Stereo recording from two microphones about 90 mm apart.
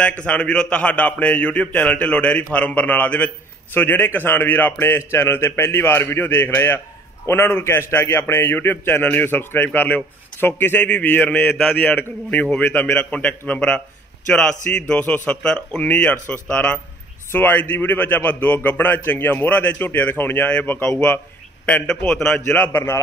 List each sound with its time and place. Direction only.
0.0 s a man's voice: 15° left (ahead or behind)
22.7 s a man's voice: 30° left (ahead or behind)